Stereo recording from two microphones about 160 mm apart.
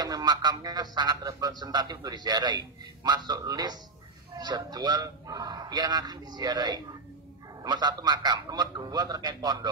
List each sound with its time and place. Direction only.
0.0 s speech: 25° right (ahead or behind)